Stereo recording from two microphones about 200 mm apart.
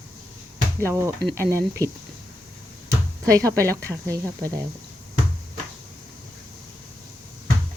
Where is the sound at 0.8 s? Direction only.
15° right (ahead or behind).